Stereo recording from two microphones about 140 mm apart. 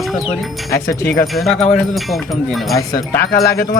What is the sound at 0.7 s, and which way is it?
Speech, 20° left (ahead or behind).